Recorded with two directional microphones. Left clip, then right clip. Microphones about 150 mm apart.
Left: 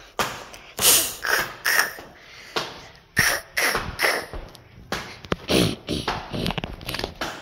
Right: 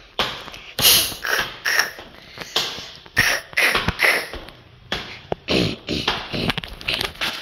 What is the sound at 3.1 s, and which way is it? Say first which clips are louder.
Cough: right 3 dB; 15° left (ahead or behind).